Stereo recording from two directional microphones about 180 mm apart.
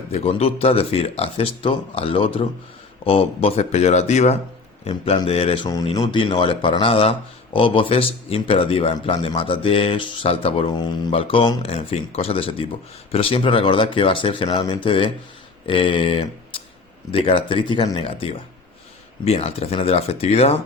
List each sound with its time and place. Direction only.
0.1 s speech: 35° left (ahead or behind)